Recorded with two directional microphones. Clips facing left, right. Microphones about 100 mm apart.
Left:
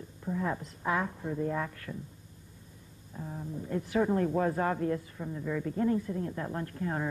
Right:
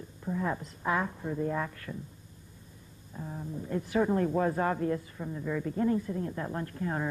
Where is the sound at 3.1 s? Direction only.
15° right (ahead or behind).